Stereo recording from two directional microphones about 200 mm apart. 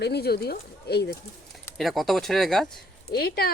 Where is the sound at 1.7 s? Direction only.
Centre (ahead or behind).